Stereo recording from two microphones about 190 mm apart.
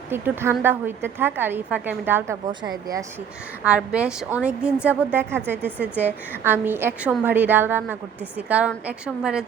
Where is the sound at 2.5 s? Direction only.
20° right (ahead or behind).